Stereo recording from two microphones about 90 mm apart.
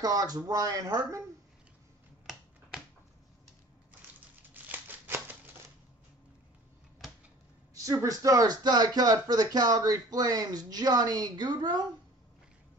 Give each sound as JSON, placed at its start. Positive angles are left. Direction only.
{"t": 0.0, "sound": "speech", "side_deg": -45}
{"t": 4.4, "sound": "crumpling", "side_deg": -20}
{"t": 7.7, "sound": "speech", "side_deg": -40}